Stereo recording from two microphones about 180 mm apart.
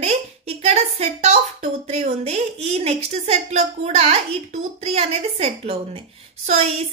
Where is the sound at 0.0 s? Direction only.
35° right (ahead or behind).